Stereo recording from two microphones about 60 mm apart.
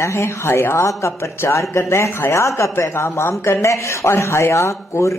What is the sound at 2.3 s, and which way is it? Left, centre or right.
A man's voice, left.